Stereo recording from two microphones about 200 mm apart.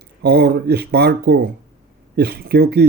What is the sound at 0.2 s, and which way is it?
Speech, 55° right (ahead or behind).